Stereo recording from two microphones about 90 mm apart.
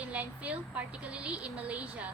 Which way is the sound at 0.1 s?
15° right (ahead or behind).